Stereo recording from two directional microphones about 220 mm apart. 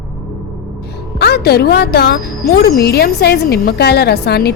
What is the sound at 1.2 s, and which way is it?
A woman's voice, 45° left (ahead or behind).